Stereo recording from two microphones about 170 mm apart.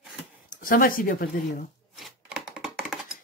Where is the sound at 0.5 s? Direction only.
55° left (ahead or behind).